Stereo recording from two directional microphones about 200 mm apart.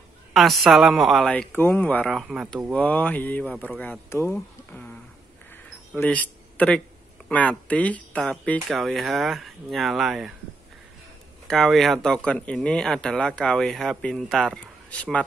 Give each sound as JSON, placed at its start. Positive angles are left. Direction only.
{"t": 0.3, "sound": "speech", "side_deg": 0}
{"t": 2.7, "sound": "speech", "side_deg": 5}
{"t": 5.9, "sound": "a man's voice", "side_deg": 5}
{"t": 11.4, "sound": "speech", "side_deg": 0}